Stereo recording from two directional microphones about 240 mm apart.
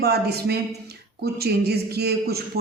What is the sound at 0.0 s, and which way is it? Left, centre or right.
A man's voice, right.